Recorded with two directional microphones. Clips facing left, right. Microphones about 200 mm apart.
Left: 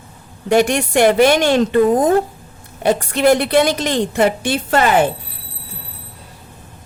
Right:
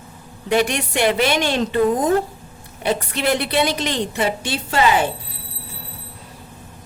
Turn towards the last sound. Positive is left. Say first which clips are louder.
# left 4 dB
turn(degrees=50)  # may be behind; listen again after turning